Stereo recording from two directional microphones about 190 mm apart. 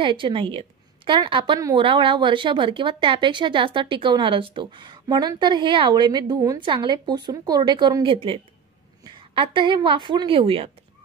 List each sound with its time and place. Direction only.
0.0 s a woman's voice: 25° right (ahead or behind)